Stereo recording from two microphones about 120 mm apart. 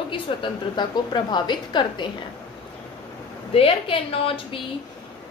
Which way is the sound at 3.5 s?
50° left (ahead or behind).